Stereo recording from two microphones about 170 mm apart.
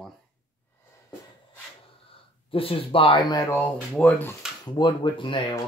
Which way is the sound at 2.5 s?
30° left (ahead or behind).